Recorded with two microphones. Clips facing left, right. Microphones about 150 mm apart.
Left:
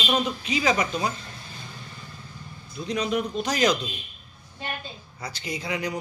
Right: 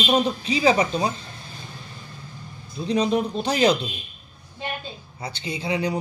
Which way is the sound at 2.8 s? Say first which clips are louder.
Right 5 dB; 30° right (ahead or behind).